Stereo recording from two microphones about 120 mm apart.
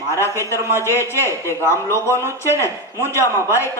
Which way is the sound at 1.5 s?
20° left (ahead or behind).